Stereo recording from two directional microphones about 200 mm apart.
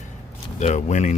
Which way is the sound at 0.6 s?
35° left (ahead or behind).